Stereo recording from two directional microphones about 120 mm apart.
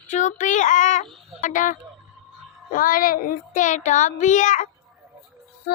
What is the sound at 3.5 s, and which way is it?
Child singing, 90° left.